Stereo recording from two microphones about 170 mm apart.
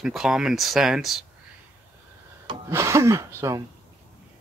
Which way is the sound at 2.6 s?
15° right (ahead or behind).